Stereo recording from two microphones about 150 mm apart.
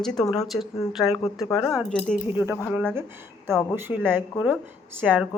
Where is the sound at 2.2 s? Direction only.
15° right (ahead or behind).